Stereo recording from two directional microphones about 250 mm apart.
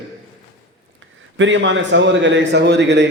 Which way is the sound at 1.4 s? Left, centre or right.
Right.